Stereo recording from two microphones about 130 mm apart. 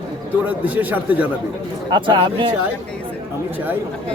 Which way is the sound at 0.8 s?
10° right (ahead or behind).